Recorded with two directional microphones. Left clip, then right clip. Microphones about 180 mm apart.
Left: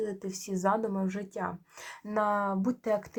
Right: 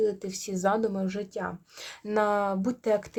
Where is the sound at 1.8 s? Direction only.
50° right (ahead or behind).